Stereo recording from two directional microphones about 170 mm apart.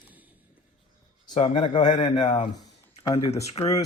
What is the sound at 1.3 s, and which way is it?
Speech, 45° left (ahead or behind).